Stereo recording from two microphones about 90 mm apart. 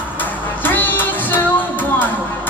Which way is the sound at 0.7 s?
20° left (ahead or behind).